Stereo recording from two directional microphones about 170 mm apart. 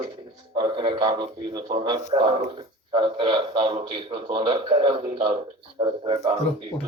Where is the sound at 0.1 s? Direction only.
30° right (ahead or behind).